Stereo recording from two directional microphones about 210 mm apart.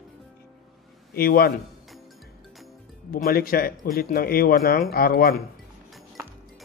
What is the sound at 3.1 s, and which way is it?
A man's voice, 45° left (ahead or behind).